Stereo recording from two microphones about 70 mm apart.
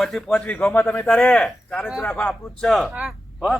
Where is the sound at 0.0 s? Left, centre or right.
Centre.